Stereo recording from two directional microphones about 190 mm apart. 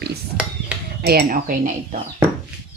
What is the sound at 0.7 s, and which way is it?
Dishes, 5° right (ahead or behind).